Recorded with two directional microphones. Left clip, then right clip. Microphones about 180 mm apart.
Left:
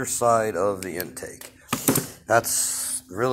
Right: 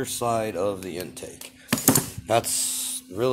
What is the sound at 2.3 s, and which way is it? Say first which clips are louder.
Speech: left 2 dB; 25° right (ahead or behind).